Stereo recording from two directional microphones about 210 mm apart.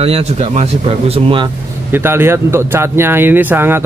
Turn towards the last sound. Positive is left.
turn(degrees=-10)  # may be behind; listen again after turning